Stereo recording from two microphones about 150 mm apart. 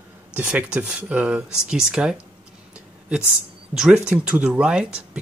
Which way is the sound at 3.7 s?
5° right (ahead or behind).